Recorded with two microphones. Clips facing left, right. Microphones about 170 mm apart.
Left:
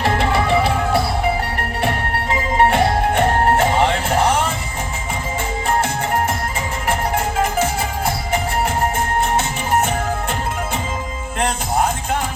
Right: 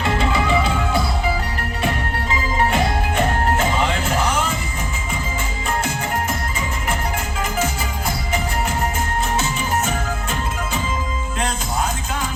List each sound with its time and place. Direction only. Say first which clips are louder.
0.0 s music: left 2 dB; 65° left (ahead or behind)
2.6 s music: left 5 dB; 60° left (ahead or behind)
9.3 s music: left 3 dB; 55° left (ahead or behind)
11.3 s music: left 5 dB; 60° left (ahead or behind)